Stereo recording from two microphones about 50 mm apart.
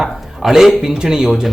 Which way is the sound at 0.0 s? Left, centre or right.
Centre.